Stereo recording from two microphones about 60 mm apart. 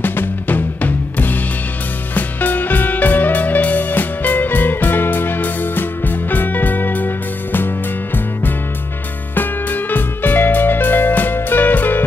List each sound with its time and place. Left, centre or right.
0.0 s music: left
9.3 s music: left